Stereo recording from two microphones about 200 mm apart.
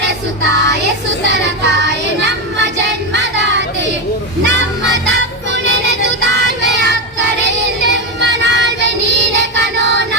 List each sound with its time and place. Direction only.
0.0 s child singing: 60° right (ahead or behind)
4.4 s music: 60° right (ahead or behind)
6.7 s child singing: 60° right (ahead or behind)
7.8 s music: 60° right (ahead or behind)